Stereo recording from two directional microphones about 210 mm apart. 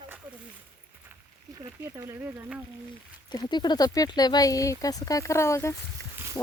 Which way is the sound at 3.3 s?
20° left (ahead or behind).